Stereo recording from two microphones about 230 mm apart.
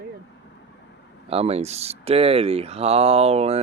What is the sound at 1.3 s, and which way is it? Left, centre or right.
Speech, right.